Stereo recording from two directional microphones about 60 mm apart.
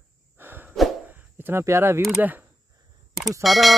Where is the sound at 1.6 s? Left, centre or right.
Right.